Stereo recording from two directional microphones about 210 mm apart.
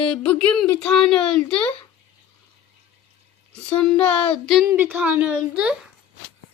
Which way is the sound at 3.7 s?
5° left (ahead or behind).